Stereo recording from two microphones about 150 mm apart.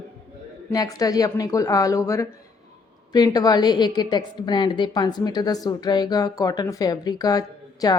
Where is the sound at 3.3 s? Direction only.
25° left (ahead or behind).